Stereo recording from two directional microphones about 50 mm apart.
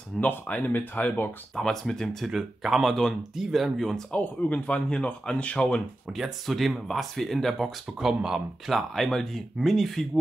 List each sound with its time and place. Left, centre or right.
0.2 s speech: left
1.5 s speech: centre
2.2 s speech: centre
2.9 s speech: centre
3.3 s speech: centre
4.1 s speech: left
6.1 s speech: centre
8.0 s speech: centre
8.7 s speech: centre